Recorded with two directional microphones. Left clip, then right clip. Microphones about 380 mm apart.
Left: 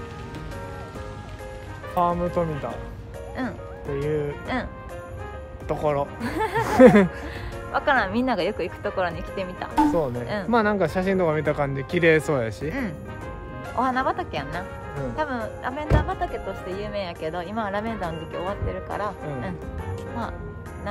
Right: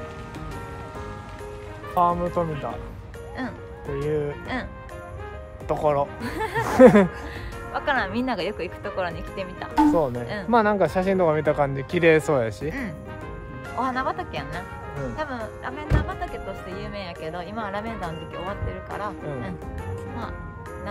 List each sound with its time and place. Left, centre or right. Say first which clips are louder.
2.0 s speech: right 1 dB; centre
5.7 s speech: right 2 dB; centre